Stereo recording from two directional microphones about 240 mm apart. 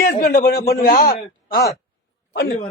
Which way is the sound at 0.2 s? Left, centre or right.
Left.